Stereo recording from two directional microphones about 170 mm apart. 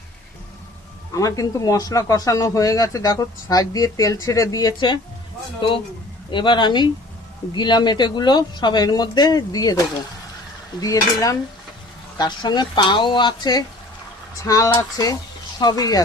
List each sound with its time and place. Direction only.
1.1 s speech: 20° left (ahead or behind)